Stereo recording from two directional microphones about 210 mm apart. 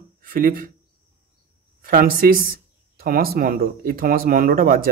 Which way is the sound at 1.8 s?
45° right (ahead or behind).